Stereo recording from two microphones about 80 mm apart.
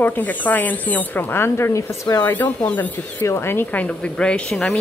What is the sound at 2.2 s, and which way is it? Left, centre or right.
Speech, left.